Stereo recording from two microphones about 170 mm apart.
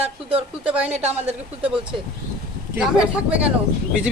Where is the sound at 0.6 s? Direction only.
5° right (ahead or behind).